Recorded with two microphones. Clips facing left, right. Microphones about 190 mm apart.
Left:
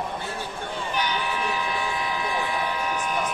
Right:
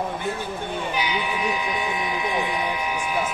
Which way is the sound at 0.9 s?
10° right (ahead or behind).